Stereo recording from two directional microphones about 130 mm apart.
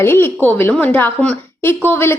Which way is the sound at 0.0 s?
15° left (ahead or behind).